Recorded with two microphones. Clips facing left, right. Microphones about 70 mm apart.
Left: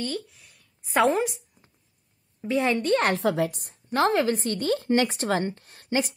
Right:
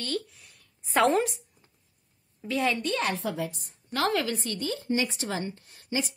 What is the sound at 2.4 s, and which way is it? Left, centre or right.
Speech, left.